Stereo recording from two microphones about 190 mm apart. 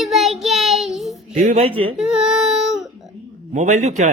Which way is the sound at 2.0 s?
Centre (ahead or behind).